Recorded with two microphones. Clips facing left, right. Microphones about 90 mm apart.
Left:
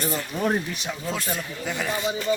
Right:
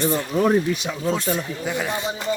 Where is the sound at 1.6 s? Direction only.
15° right (ahead or behind).